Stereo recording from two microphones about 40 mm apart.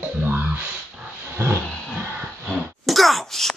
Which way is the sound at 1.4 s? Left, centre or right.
Right.